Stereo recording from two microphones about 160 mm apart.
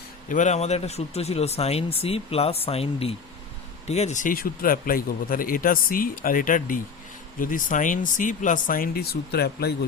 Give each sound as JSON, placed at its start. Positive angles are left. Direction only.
{"t": 0.3, "sound": "speech", "side_deg": 50}